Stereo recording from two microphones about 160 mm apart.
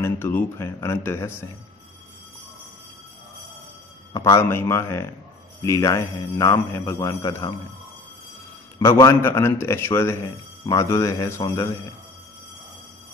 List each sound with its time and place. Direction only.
0.0 s a man's voice: 15° left (ahead or behind)
4.1 s a man's voice: 20° left (ahead or behind)
8.7 s a man's voice: 25° left (ahead or behind)